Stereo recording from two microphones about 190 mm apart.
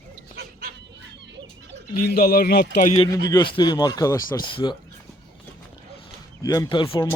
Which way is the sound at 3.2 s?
20° left (ahead or behind).